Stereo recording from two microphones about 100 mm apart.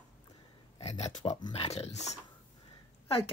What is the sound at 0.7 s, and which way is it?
Speech, 90° left.